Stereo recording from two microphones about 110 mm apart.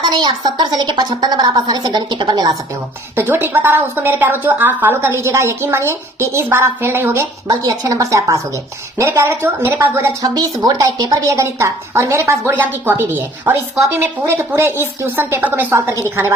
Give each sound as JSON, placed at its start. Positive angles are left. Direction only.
{"t": 0.0, "sound": "a woman's voice", "side_deg": -40}
{"t": 3.2, "sound": "a woman's voice", "side_deg": -20}
{"t": 7.4, "sound": "a woman's voice", "side_deg": -30}